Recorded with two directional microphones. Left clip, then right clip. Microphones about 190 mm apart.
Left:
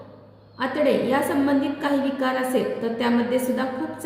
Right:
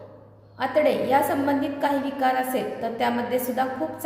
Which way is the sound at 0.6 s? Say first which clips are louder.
Even; 15° right (ahead or behind).